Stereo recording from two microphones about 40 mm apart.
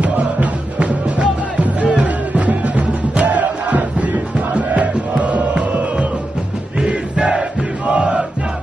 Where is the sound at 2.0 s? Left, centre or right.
Right.